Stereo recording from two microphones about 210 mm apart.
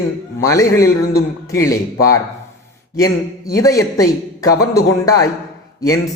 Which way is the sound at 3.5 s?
15° left (ahead or behind).